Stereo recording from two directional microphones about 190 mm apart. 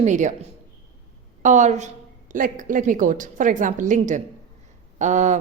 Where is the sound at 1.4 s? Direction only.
40° right (ahead or behind).